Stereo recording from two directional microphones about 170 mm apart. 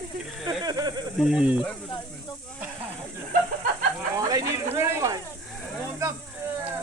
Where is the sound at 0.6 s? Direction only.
20° right (ahead or behind).